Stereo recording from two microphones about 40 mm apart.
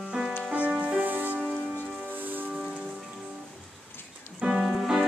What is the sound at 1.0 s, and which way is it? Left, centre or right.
Music, right.